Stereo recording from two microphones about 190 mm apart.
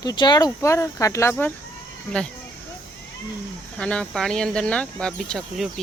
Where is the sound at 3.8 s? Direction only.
5° left (ahead or behind).